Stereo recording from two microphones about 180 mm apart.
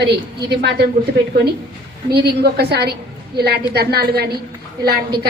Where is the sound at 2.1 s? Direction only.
65° right (ahead or behind).